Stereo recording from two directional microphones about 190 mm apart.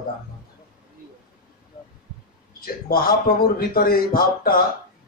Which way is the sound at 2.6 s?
50° left (ahead or behind).